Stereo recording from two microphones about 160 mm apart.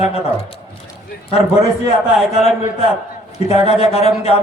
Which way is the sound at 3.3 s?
40° left (ahead or behind).